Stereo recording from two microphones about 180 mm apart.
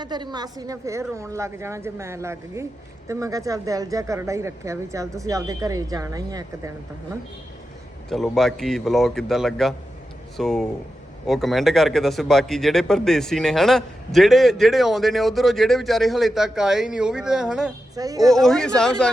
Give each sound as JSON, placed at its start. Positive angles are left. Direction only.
{"t": 0.0, "sound": "speech", "side_deg": -25}
{"t": 8.1, "sound": "speech", "side_deg": 0}
{"t": 17.9, "sound": "speech", "side_deg": -20}
{"t": 18.3, "sound": "speech", "side_deg": 0}